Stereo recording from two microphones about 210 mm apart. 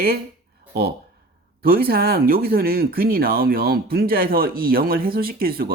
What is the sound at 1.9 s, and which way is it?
Speech, 45° right (ahead or behind).